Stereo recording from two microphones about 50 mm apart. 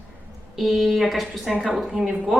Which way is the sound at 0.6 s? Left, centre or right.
Centre.